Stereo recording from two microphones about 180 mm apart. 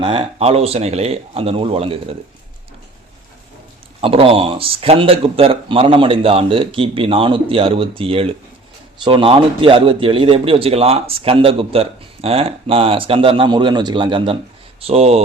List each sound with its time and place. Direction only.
0.0 s speech: 30° right (ahead or behind)
4.0 s speech: 30° right (ahead or behind)